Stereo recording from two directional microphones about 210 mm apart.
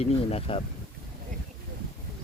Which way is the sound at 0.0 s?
30° left (ahead or behind).